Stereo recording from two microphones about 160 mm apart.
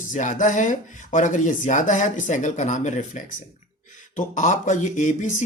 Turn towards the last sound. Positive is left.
turn(degrees=50)  # may be behind; listen again after turning